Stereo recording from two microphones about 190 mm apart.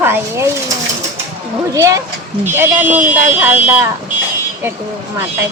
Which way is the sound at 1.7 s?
15° right (ahead or behind).